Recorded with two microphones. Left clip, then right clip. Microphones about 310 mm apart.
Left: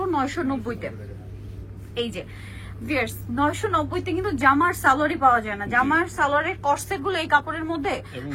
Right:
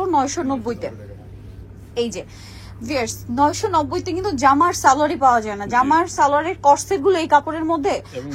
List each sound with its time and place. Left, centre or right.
0.0 s a woman's voice: centre
2.9 s a woman's voice: centre